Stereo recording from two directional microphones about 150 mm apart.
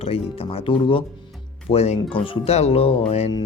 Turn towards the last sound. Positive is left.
turn(degrees=45)  # may be behind; listen again after turning